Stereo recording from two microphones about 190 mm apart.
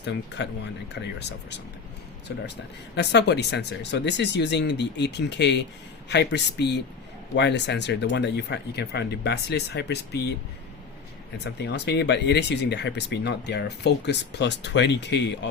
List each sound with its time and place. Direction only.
0.4 s speech: 65° left (ahead or behind)
2.9 s speech: 60° left (ahead or behind)
11.6 s speech: 60° left (ahead or behind)